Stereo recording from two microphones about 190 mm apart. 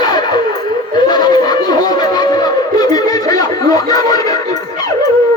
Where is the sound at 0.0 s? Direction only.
20° left (ahead or behind).